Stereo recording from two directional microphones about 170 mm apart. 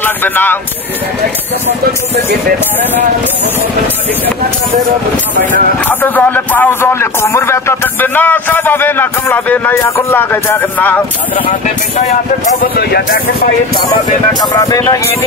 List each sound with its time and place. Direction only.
0.0 s speech: 10° left (ahead or behind)
5.9 s a man's voice: 10° left (ahead or behind)
14.4 s speech: 20° left (ahead or behind)